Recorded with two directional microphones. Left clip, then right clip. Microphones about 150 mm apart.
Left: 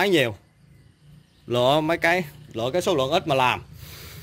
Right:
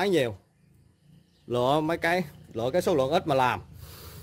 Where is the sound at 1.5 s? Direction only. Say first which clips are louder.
Left 5 dB; 5° right (ahead or behind).